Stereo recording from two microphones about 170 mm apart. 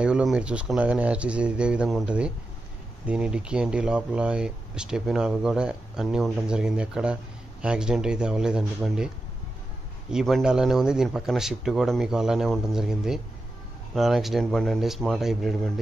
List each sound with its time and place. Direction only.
0.0 s speech: 5° right (ahead or behind)
10.1 s speech: centre (ahead or behind)